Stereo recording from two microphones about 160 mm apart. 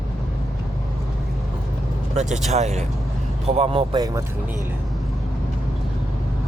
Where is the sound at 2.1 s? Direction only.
50° right (ahead or behind).